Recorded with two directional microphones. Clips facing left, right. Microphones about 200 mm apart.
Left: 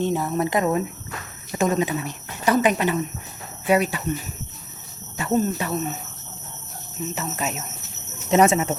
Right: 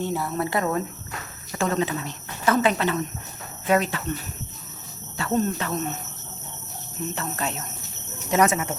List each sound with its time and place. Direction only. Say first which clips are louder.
0.0 s speech: left 4 dB; 20° left (ahead or behind)
5.3 s speech: left 2 dB; 10° left (ahead or behind)
7.0 s speech: left 1 dB; 5° left (ahead or behind)
8.3 s speech: left 4 dB; 25° left (ahead or behind)